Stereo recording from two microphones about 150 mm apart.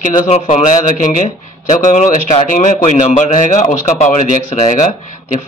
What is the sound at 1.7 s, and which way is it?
A man's voice, 60° left (ahead or behind).